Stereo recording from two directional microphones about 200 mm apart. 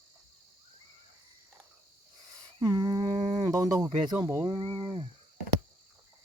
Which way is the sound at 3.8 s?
15° right (ahead or behind).